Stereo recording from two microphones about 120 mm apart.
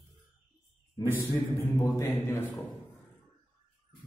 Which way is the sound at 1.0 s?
20° left (ahead or behind).